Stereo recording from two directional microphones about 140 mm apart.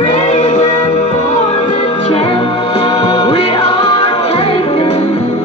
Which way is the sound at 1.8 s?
40° left (ahead or behind).